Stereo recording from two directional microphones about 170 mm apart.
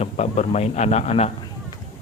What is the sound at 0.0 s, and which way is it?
Speech, 40° left (ahead or behind).